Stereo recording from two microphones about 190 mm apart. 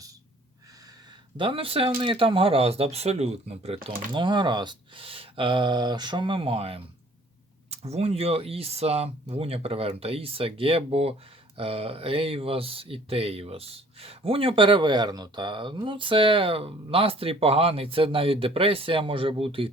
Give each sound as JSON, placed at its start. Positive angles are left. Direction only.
{"t": 1.4, "sound": "speech", "side_deg": -30}